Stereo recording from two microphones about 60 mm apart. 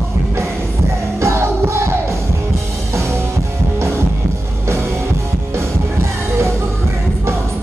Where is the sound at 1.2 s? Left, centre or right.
Right.